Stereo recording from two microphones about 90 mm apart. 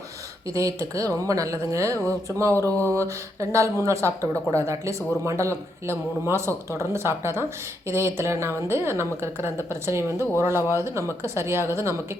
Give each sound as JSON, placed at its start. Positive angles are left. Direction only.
{"t": 0.5, "sound": "a woman's voice", "side_deg": -35}